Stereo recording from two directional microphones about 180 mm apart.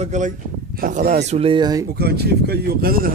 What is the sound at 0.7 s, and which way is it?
Speech, 55° right (ahead or behind).